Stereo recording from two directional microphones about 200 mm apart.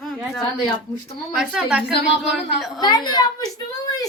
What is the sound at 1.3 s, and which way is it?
A woman's voice, 5° right (ahead or behind).